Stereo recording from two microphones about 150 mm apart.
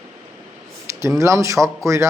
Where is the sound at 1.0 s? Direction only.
20° right (ahead or behind).